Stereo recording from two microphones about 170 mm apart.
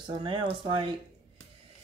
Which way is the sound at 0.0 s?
30° right (ahead or behind).